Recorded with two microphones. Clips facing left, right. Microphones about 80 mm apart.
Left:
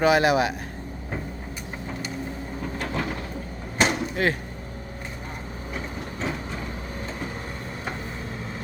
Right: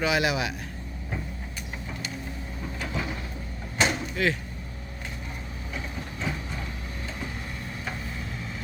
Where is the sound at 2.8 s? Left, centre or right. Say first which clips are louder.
Left 3 dB; left.